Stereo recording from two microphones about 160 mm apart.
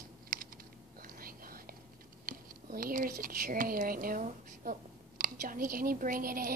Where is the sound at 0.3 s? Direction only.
60° right (ahead or behind).